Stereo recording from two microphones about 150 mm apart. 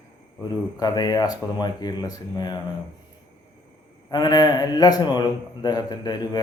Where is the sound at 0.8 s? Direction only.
25° left (ahead or behind).